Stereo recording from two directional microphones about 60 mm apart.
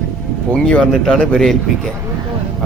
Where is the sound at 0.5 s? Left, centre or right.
Centre.